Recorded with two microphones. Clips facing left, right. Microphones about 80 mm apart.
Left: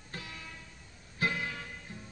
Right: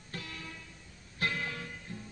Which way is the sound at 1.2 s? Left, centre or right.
Centre.